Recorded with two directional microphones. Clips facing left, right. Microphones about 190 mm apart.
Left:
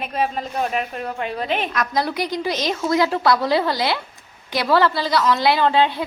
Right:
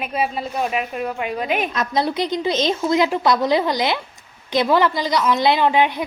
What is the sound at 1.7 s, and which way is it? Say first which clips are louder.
A woman's voice: right 2 dB; 25° right (ahead or behind).